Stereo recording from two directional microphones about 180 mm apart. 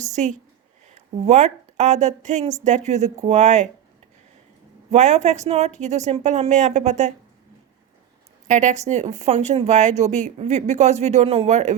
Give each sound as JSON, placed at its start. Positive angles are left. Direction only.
{"t": 0.0, "sound": "speech", "side_deg": -40}
{"t": 4.9, "sound": "speech", "side_deg": -40}
{"t": 8.4, "sound": "speech", "side_deg": -40}